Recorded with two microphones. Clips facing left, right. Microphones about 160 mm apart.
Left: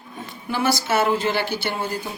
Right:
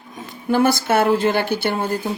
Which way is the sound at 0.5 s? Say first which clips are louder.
Right 5 dB; 50° right (ahead or behind).